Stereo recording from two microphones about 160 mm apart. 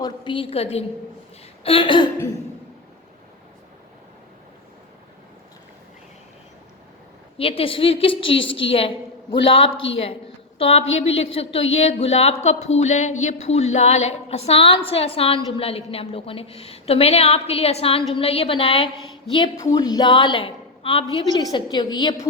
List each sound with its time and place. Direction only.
0.0 s a woman's voice: 30° left (ahead or behind)
7.3 s a woman's voice: 35° left (ahead or behind)
19.5 s a woman's voice: 20° left (ahead or behind)